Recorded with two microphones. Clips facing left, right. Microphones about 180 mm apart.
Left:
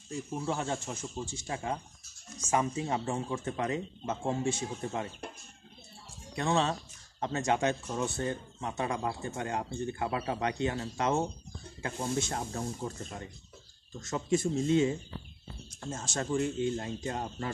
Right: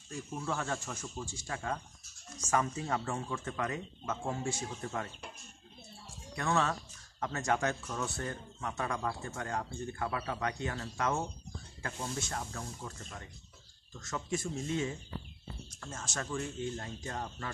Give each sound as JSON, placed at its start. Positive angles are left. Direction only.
{"t": 0.1, "sound": "speech", "side_deg": 25}
{"t": 6.3, "sound": "speech", "side_deg": 25}